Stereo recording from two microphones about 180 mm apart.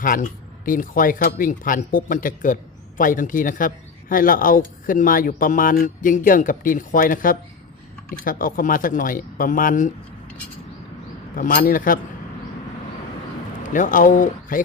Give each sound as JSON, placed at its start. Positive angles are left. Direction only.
{"t": 0.0, "sound": "speech", "side_deg": 50}
{"t": 11.3, "sound": "speech", "side_deg": 50}
{"t": 13.7, "sound": "speech", "side_deg": 45}